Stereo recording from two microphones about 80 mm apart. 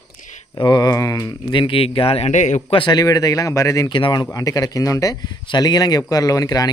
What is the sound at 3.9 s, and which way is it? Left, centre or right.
Speech, left.